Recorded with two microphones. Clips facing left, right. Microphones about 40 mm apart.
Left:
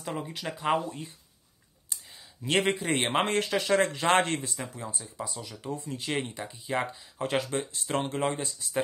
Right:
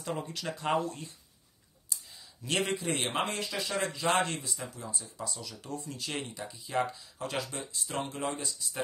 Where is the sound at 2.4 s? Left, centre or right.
Left.